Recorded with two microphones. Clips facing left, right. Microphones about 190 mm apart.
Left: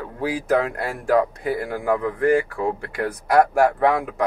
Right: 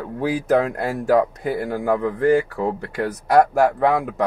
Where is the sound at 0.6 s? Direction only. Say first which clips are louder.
Right 3 dB; 40° right (ahead or behind).